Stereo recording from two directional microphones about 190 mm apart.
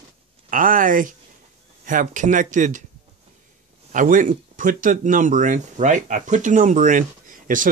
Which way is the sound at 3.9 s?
45° right (ahead or behind).